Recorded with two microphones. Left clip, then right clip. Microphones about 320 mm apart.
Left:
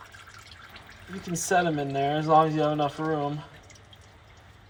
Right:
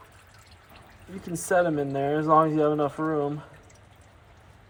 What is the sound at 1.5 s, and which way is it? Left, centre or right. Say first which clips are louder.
Speech: right 1 dB; right.